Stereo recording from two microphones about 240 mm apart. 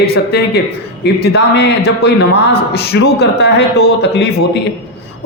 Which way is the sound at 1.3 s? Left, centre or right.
Left.